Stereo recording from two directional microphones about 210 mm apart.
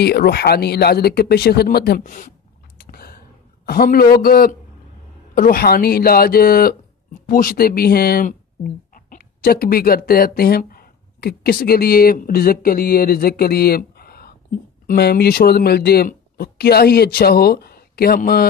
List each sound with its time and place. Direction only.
0.0 s speech: 50° left (ahead or behind)
2.8 s a sound: 45° left (ahead or behind)
3.6 s speech: 45° left (ahead or behind)